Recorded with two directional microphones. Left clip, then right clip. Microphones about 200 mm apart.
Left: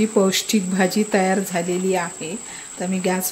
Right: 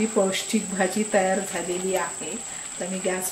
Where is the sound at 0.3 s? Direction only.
55° left (ahead or behind).